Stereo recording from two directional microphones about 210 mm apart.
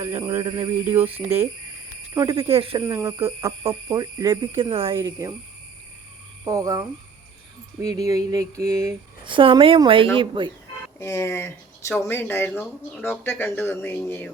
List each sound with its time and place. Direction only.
0.2 s speech: 20° right (ahead or behind)
2.1 s speech: 15° right (ahead or behind)
2.5 s speech: 25° right (ahead or behind)
2.8 s speech: 15° right (ahead or behind)
4.7 s speech: 25° right (ahead or behind)
4.9 s speech: 15° right (ahead or behind)
6.4 s speech: 15° right (ahead or behind)
11.0 s speech: 10° left (ahead or behind)